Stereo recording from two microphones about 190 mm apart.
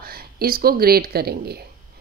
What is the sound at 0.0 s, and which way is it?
A woman's voice, 50° right (ahead or behind).